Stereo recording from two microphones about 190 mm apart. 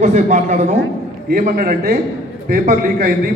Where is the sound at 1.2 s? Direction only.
50° right (ahead or behind).